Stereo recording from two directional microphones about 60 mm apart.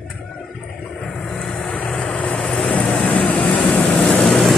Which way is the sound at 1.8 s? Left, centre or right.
Centre.